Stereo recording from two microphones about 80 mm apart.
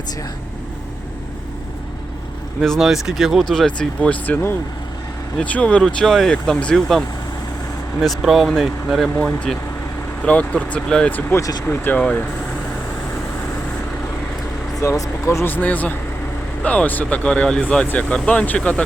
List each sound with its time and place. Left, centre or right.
2.6 s speech: centre
3.5 s speech: centre
8.0 s speech: centre
11.3 s speech: left
11.9 s speech: centre
14.8 s speech: left
15.4 s speech: left